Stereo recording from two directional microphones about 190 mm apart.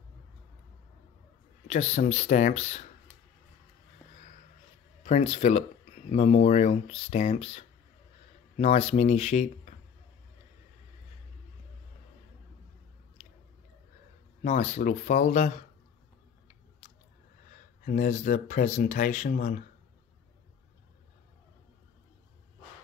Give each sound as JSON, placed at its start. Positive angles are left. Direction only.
{"t": 1.7, "sound": "speech", "side_deg": 35}
{"t": 5.0, "sound": "speech", "side_deg": 35}
{"t": 14.4, "sound": "speech", "side_deg": 35}
{"t": 17.8, "sound": "speech", "side_deg": 40}